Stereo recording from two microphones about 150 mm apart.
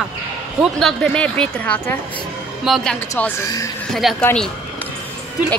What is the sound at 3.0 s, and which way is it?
Speech, 10° left (ahead or behind).